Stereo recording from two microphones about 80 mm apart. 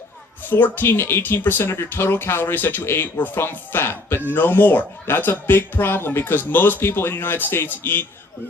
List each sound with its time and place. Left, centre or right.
0.4 s speech: left